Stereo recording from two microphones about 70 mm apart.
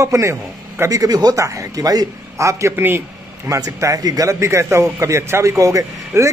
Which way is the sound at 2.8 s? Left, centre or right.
Right.